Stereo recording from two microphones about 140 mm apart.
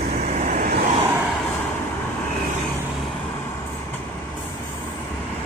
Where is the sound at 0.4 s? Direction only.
80° right.